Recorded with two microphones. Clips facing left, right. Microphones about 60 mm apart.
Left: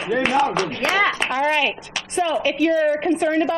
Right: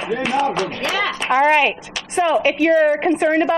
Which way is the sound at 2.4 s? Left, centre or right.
Right.